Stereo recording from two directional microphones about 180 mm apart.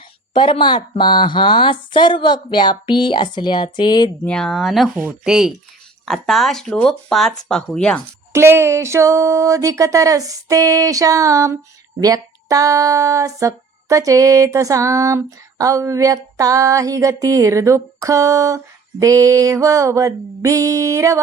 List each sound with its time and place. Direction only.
0.3 s speech: 25° left (ahead or behind)
4.3 s speech: 5° left (ahead or behind)
8.3 s speech: 15° right (ahead or behind)